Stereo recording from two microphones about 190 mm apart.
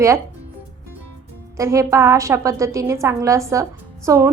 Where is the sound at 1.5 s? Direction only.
15° right (ahead or behind).